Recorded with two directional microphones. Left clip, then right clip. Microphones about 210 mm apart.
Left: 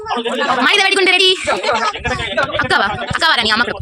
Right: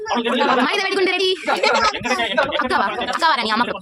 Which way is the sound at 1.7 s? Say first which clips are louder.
Even; 45° right (ahead or behind).